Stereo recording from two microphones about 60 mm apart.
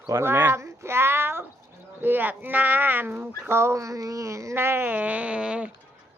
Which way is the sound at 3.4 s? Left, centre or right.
Right.